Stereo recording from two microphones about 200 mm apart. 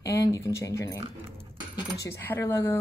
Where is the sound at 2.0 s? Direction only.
10° left (ahead or behind).